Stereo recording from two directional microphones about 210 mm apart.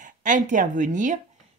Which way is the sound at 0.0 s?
35° right (ahead or behind).